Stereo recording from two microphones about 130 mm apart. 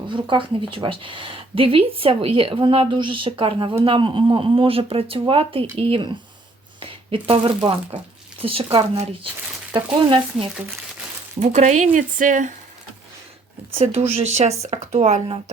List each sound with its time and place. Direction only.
0.1 s speech: 40° right (ahead or behind)
6.7 s a sound: 45° right (ahead or behind)
8.4 s speech: 45° right (ahead or behind)
11.3 s speech: 65° right (ahead or behind); by 12.5 s 85° right
13.9 s speech: 55° right (ahead or behind)